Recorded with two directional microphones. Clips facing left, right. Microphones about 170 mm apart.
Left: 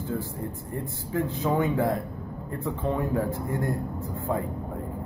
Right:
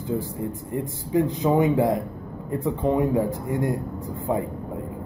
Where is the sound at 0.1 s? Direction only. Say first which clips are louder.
Right 6 dB; 15° right (ahead or behind).